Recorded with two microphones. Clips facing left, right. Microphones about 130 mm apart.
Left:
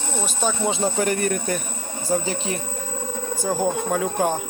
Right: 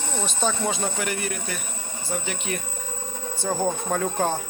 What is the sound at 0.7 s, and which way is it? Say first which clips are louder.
Speech: left 5 dB; 30° left (ahead or behind).